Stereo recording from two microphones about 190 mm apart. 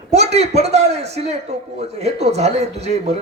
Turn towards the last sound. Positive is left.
turn(degrees=-35)  # may be behind; listen again after turning